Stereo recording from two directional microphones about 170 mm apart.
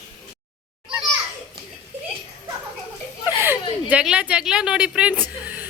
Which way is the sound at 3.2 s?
15° right (ahead or behind).